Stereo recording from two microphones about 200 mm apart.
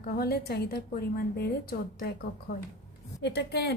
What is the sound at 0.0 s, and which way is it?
A woman's voice, 45° left (ahead or behind).